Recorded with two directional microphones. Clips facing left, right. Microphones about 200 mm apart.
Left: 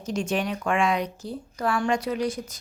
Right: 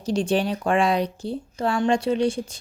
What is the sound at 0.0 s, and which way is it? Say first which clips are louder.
Speech: right 5 dB; 30° right (ahead or behind).